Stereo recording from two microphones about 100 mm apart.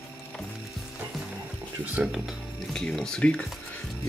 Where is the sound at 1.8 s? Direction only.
15° right (ahead or behind).